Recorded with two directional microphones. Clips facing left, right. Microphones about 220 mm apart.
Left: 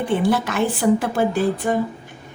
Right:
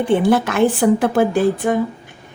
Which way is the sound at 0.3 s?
55° right (ahead or behind).